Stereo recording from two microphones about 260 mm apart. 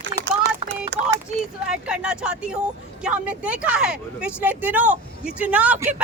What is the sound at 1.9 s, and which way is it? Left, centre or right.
Speech, centre.